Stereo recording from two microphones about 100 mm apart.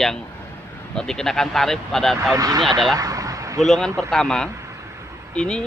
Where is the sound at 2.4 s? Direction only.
40° right (ahead or behind).